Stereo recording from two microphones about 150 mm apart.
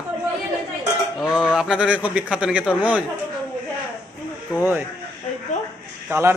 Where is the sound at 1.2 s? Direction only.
5° right (ahead or behind).